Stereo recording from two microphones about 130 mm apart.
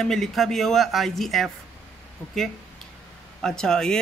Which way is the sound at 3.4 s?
5° left (ahead or behind).